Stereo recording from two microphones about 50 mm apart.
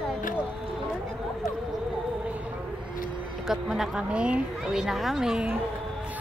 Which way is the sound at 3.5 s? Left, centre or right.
Centre.